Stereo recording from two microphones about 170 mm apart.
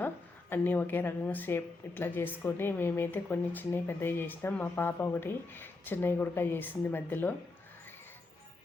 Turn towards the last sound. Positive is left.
turn(degrees=10)  # may be behind; listen again after turning